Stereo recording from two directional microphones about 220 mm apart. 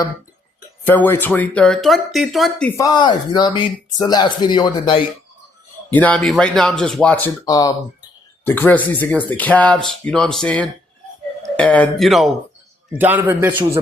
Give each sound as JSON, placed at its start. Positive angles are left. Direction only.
{"t": 0.9, "sound": "speech", "side_deg": 10}
{"t": 5.9, "sound": "speech", "side_deg": 5}
{"t": 7.4, "sound": "a man's voice", "side_deg": 15}